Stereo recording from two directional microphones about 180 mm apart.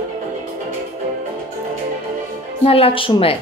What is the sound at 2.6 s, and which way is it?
Speech, 30° left (ahead or behind).